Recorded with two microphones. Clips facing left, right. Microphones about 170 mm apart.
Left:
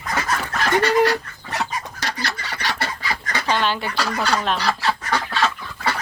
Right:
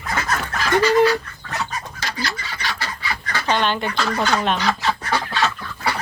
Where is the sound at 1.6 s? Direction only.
65° left (ahead or behind).